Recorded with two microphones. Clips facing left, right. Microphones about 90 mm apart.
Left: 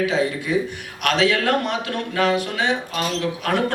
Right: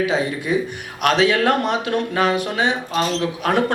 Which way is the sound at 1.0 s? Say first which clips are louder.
Right 3 dB; 20° right (ahead or behind).